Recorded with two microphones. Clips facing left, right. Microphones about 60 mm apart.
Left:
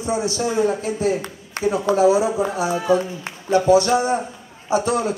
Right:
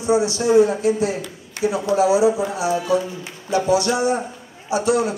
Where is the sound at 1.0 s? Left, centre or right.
Left.